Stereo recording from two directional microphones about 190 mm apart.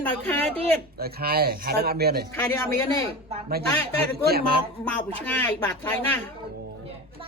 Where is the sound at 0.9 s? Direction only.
55° right (ahead or behind).